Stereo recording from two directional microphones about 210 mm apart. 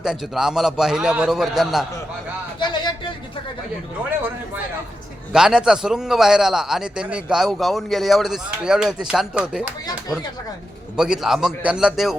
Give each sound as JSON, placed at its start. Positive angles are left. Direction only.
{"t": 0.0, "sound": "a man's voice", "side_deg": -5}
{"t": 2.6, "sound": "a sound", "side_deg": 20}
{"t": 5.3, "sound": "a man's voice", "side_deg": -5}
{"t": 10.9, "sound": "a man's voice", "side_deg": 0}